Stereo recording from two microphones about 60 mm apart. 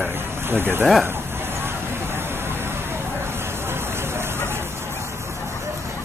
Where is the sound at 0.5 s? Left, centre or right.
Right.